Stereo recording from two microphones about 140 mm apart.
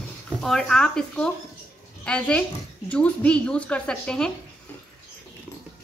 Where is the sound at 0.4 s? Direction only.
5° left (ahead or behind).